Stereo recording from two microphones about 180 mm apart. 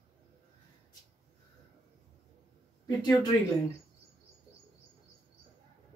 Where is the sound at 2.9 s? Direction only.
20° left (ahead or behind).